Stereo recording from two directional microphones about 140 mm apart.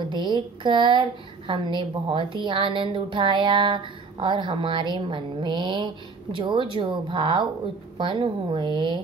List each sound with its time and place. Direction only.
0.0 s a woman's voice: 35° right (ahead or behind)